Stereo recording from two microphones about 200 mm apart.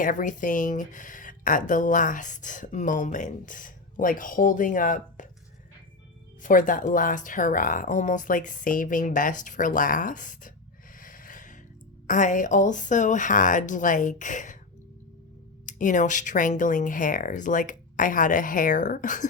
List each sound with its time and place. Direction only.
0.0 s speech: 40° left (ahead or behind)
6.4 s speech: 40° left (ahead or behind)
10.9 s snort: 45° left (ahead or behind)
12.0 s speech: 40° left (ahead or behind)
15.6 s speech: 40° left (ahead or behind)